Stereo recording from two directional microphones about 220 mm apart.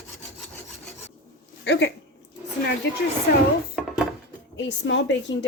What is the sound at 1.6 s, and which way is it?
Speech, 55° left (ahead or behind).